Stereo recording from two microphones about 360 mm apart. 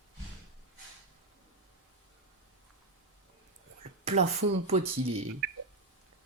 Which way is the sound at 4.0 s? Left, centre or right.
Centre.